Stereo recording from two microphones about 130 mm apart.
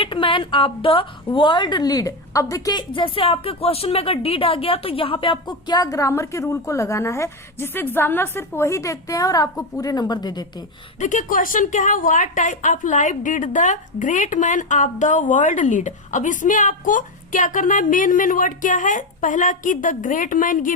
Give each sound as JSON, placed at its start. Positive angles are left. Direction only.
{"t": 0.0, "sound": "a woman's voice", "side_deg": 40}
{"t": 2.9, "sound": "speech", "side_deg": 40}
{"t": 11.0, "sound": "a woman's voice", "side_deg": 75}